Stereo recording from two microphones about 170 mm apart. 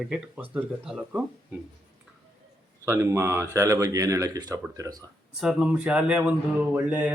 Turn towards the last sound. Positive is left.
turn(degrees=-10)  # may be behind; listen again after turning